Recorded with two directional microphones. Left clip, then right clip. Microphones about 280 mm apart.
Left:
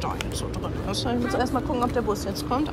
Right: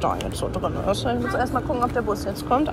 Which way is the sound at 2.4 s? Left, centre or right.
Centre.